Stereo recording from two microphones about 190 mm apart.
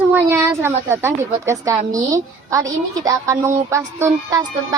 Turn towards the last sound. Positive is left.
turn(degrees=-15)  # may be behind; listen again after turning